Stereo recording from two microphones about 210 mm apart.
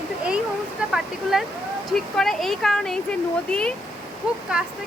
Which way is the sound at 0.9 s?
Centre (ahead or behind).